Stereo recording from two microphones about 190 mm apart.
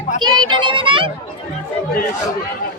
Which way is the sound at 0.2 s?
25° right (ahead or behind).